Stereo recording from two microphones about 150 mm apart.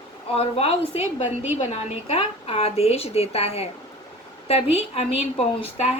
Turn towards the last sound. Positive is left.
turn(degrees=45)  # may be behind; listen again after turning